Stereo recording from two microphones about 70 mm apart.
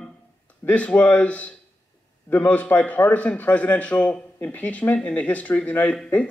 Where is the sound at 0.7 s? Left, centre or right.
Left.